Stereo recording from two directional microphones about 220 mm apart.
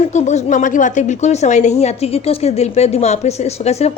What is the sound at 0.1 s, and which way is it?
A woman's voice, 30° left (ahead or behind).